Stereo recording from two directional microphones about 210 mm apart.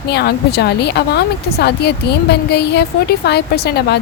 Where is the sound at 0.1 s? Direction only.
50° left (ahead or behind).